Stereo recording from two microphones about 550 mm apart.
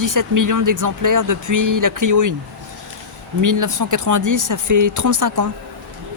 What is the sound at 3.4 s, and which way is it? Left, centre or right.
Speech, right.